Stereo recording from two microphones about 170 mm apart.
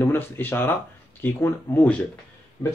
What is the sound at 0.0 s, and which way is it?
Speech, 15° left (ahead or behind).